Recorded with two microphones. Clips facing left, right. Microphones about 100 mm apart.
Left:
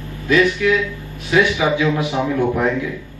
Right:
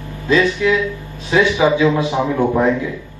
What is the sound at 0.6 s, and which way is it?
A man's voice, 20° right (ahead or behind).